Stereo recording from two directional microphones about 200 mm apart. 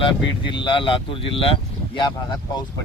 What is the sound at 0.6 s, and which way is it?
Speech, 25° left (ahead or behind).